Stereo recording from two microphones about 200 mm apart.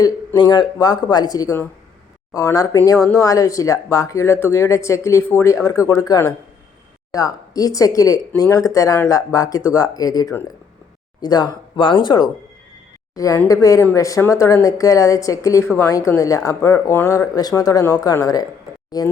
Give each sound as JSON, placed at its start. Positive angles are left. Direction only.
{"t": 0.0, "sound": "speech", "side_deg": 20}